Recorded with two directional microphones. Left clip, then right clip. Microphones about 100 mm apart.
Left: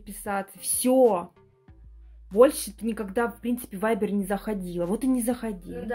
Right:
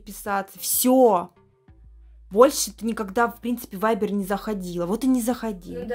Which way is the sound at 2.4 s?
30° right (ahead or behind).